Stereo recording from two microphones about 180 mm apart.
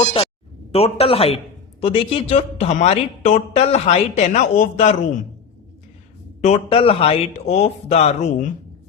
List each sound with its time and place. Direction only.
0.0 s a man's voice: 30° left (ahead or behind)
6.4 s speech: 35° left (ahead or behind)